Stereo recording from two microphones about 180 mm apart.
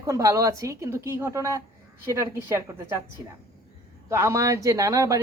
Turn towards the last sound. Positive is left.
turn(degrees=-20)  # may be behind; listen again after turning